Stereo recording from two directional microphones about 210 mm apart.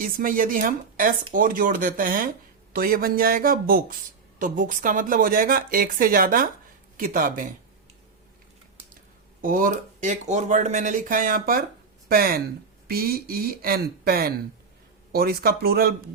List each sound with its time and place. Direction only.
0.0 s speech: 40° right (ahead or behind)
9.4 s speech: 40° right (ahead or behind)